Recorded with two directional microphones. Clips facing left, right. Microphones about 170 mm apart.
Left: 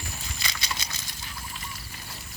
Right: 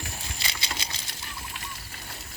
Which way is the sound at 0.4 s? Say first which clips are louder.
Left 1 dB; 30° right (ahead or behind).